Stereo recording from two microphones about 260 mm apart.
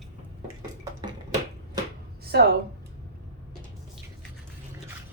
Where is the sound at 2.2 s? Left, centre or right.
Right.